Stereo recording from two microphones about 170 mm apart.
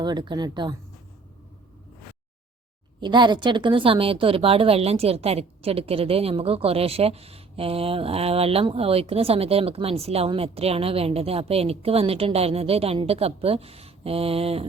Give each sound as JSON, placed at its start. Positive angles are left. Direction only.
{"t": 0.0, "sound": "speech", "side_deg": -25}
{"t": 3.0, "sound": "a woman's voice", "side_deg": -25}